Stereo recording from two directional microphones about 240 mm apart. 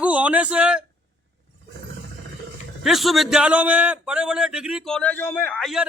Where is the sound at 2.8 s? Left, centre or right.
Centre.